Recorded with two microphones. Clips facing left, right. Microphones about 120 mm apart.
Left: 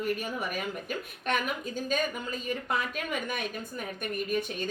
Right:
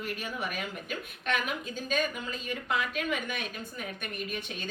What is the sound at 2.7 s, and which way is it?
Speech, 40° left (ahead or behind).